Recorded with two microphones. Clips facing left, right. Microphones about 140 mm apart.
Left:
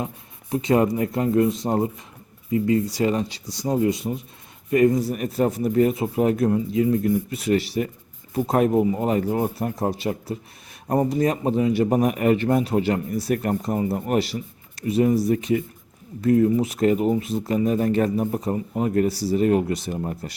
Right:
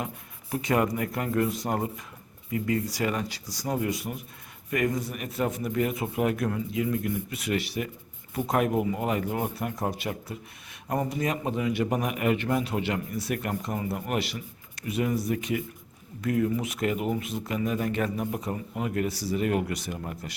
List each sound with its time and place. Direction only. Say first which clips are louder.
0.5 s a man's voice: left 6 dB; 25° left (ahead or behind)